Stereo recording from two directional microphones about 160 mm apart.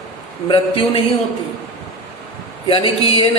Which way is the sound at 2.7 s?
35° left (ahead or behind).